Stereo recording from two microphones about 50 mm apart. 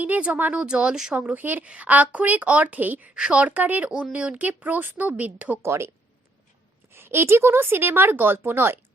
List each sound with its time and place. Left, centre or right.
0.3 s a woman's voice: right
0.6 s speech: right
1.1 s a woman's voice: right
3.2 s a woman's voice: right
5.6 s speech: right
6.9 s a woman's voice: right